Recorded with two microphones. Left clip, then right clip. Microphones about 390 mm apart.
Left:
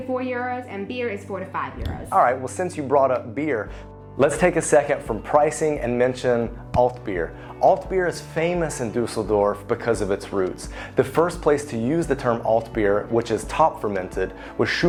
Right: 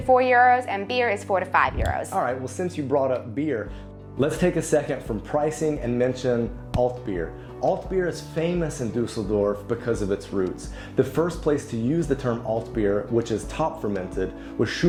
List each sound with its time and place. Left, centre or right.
0.1 s a woman's voice: right
1.8 s speech: left